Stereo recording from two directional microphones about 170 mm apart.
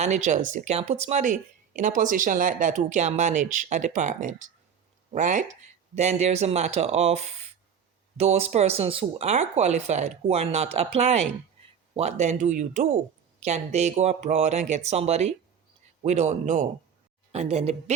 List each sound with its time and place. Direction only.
0.0 s speech: 45° right (ahead or behind)